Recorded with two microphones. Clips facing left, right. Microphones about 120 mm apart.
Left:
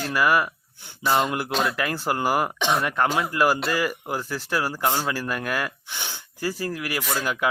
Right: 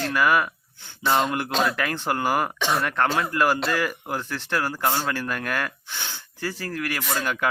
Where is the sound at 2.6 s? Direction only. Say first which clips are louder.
Left 1 dB; 20° left (ahead or behind).